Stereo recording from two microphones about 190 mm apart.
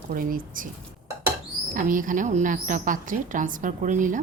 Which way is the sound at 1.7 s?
45° right (ahead or behind).